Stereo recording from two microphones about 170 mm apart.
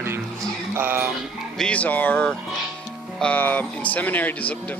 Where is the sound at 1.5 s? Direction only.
5° left (ahead or behind).